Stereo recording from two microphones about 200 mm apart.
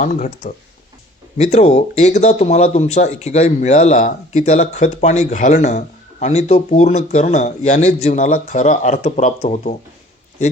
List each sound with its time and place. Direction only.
0.0 s speech: 40° left (ahead or behind)